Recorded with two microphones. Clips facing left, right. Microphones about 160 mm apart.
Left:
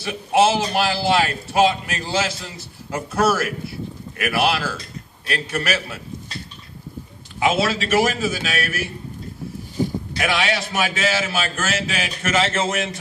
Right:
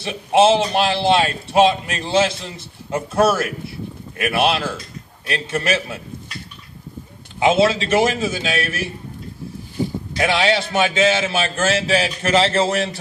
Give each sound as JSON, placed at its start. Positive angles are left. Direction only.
{"t": 0.0, "sound": "a man's voice", "side_deg": -25}
{"t": 7.3, "sound": "a man's voice", "side_deg": -25}
{"t": 10.2, "sound": "a man's voice", "side_deg": -30}